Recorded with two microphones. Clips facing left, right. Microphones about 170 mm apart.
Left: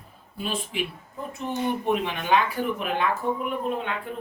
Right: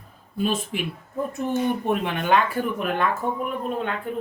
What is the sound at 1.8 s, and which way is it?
Speech, 55° right (ahead or behind).